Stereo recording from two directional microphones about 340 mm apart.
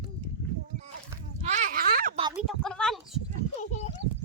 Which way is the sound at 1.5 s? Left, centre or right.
Right.